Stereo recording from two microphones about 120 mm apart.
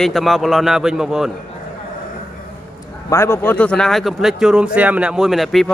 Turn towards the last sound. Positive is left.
turn(degrees=0)  # may be behind; listen again after turning